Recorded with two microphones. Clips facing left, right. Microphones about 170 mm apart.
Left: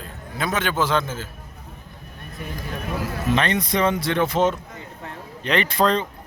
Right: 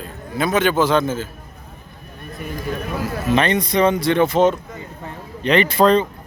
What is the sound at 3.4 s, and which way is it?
Speech, centre (ahead or behind).